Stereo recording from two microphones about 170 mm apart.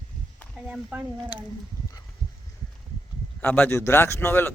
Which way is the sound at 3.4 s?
10° left (ahead or behind).